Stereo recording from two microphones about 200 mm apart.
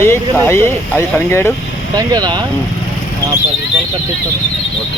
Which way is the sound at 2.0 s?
20° right (ahead or behind).